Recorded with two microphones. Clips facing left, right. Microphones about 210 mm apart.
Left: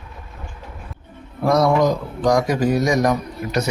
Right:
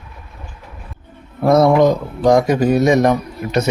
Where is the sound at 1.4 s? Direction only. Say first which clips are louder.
Right 5 dB; 25° right (ahead or behind).